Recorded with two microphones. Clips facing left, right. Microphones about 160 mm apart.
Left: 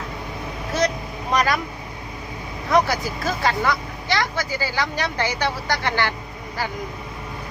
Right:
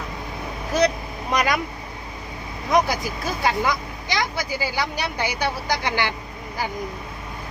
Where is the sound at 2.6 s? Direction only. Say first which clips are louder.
Left 1 dB; 15° right (ahead or behind).